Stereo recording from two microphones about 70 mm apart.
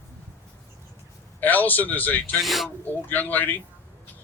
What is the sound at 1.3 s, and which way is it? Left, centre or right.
Speech, left.